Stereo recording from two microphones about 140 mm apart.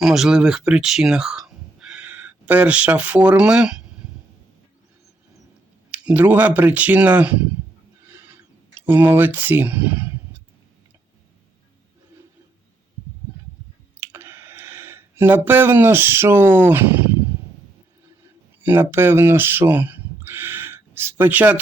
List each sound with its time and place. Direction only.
0.0 s speech: 5° right (ahead or behind)
6.1 s speech: 10° right (ahead or behind)
8.9 s speech: 15° right (ahead or behind)
14.0 s a sound: 15° right (ahead or behind)
18.6 s speech: 15° right (ahead or behind)